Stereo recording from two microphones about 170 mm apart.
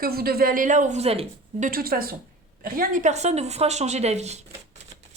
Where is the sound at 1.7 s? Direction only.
60° right (ahead or behind); by 4.3 s 40° right (ahead or behind).